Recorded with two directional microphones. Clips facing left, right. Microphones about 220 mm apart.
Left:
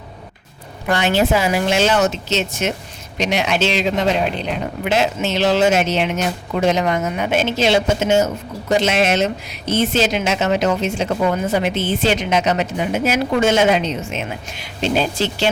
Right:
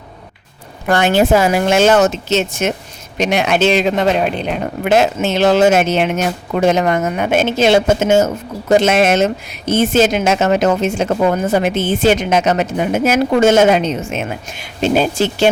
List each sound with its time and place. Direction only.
0.9 s speech: 50° right (ahead or behind)